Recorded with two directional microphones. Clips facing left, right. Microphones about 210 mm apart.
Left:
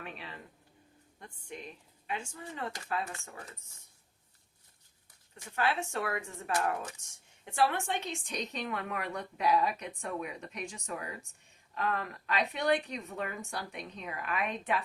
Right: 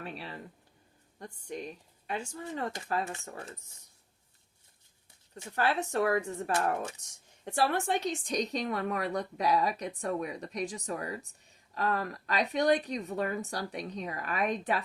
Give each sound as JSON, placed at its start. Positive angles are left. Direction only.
{"t": 0.0, "sound": "a woman's voice", "side_deg": -35}
{"t": 5.5, "sound": "a woman's voice", "side_deg": -40}